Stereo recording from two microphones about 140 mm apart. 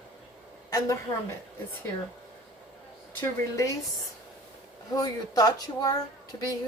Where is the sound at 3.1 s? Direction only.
20° left (ahead or behind).